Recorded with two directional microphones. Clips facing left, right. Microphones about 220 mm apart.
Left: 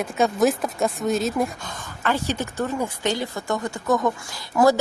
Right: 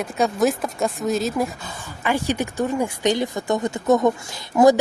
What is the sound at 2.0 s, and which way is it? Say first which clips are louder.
A woman's voice: right 2 dB; 15° right (ahead or behind).